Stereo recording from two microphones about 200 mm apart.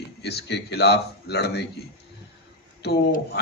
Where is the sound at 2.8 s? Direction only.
55° left (ahead or behind).